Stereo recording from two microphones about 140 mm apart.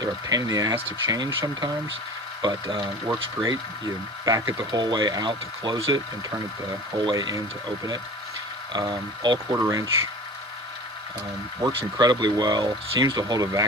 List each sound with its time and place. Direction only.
0.0 s speech: 25° right (ahead or behind)
2.4 s speech: 30° right (ahead or behind)
7.0 s speech: 30° right (ahead or behind)
8.7 s speech: 30° right (ahead or behind)
9.5 s speech: 20° right (ahead or behind)
11.6 s speech: 35° right (ahead or behind)